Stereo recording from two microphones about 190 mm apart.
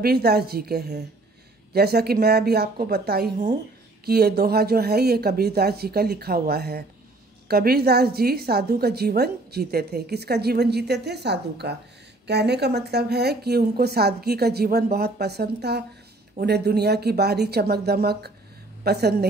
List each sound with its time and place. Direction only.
0.0 s a woman's voice: 55° right (ahead or behind)